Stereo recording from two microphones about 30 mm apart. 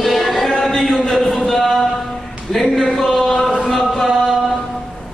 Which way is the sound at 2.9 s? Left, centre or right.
Centre.